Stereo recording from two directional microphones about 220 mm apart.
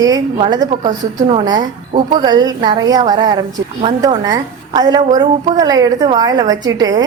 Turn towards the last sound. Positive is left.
turn(degrees=-15)  # may be behind; listen again after turning